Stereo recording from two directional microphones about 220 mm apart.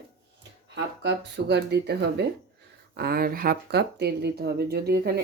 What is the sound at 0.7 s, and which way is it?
Speech, 50° right (ahead or behind).